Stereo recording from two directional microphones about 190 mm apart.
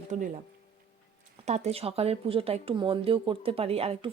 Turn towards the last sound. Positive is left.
turn(degrees=-30)  # may be behind; listen again after turning